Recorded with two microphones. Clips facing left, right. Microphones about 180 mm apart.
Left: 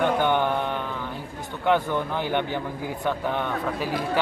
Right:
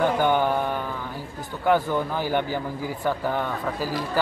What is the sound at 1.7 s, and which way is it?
A man's voice, 5° right (ahead or behind).